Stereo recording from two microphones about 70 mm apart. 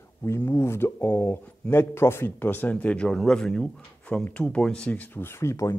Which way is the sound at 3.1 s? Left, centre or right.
Centre.